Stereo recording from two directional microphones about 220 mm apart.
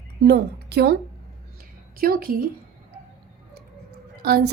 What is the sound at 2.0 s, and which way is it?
Speech, 40° right (ahead or behind).